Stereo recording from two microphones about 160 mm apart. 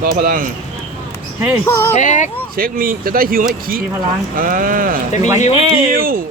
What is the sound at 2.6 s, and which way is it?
Speech, 65° right (ahead or behind).